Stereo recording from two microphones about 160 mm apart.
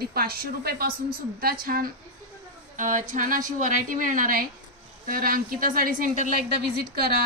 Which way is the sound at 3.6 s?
55° right (ahead or behind).